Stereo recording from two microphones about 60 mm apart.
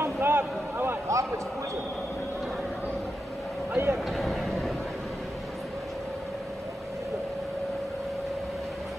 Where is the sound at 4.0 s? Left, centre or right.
Centre.